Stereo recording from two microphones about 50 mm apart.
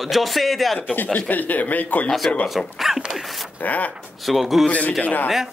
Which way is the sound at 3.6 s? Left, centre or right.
Left.